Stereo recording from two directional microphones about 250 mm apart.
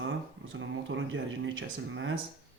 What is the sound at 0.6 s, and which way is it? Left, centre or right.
Speech, right.